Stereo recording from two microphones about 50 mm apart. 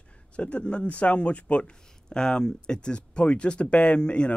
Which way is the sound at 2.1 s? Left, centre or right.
Centre.